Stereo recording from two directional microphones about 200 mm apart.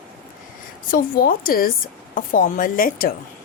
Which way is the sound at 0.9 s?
45° left (ahead or behind).